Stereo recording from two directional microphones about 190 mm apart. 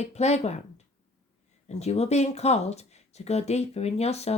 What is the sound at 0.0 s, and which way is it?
Speech, 35° left (ahead or behind).